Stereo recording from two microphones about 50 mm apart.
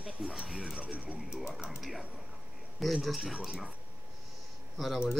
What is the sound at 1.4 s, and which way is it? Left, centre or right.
Speech, centre.